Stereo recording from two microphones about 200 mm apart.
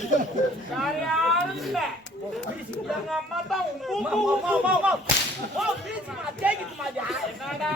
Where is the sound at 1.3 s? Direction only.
Centre (ahead or behind).